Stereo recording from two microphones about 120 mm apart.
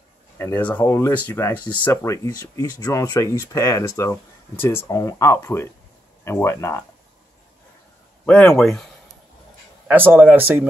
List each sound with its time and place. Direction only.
0.6 s speech: 10° left (ahead or behind)
8.3 s speech: 10° left (ahead or behind)
9.8 s speech: 15° right (ahead or behind)